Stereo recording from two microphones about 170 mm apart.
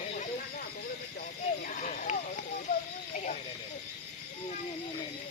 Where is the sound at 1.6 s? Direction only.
50° left (ahead or behind).